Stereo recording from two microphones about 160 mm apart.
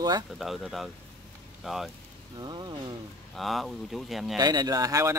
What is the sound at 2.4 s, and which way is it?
Speech, 25° right (ahead or behind).